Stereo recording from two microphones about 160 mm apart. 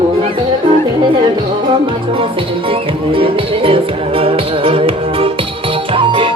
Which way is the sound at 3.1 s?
35° right (ahead or behind).